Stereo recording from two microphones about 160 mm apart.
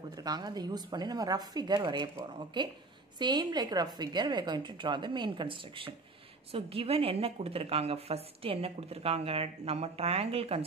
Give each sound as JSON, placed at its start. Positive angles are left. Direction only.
{"t": 0.1, "sound": "a woman's voice", "side_deg": -25}